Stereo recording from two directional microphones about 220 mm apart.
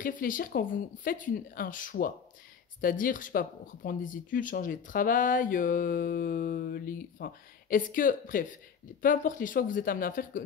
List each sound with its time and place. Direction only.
0.0 s speech: 40° left (ahead or behind)